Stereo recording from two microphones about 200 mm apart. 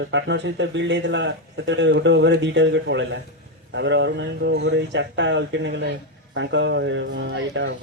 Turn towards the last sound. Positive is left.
turn(degrees=-60)  # may be behind; listen again after turning